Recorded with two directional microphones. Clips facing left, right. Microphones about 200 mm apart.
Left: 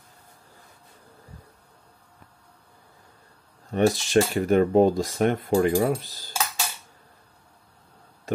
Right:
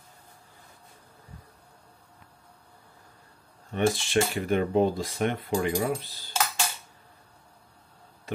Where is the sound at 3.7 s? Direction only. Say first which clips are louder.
Left 5 dB; 40° left (ahead or behind).